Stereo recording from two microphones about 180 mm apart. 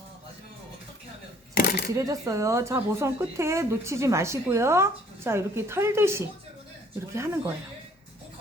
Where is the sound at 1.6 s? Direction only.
65° left (ahead or behind).